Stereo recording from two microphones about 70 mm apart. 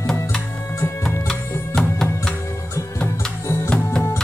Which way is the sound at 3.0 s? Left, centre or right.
Left.